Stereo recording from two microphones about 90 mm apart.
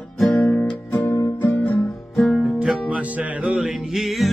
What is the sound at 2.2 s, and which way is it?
Music, 5° left (ahead or behind).